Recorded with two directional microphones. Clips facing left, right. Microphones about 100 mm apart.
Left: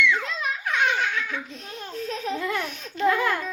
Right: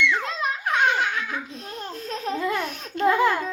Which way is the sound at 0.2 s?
45° right (ahead or behind).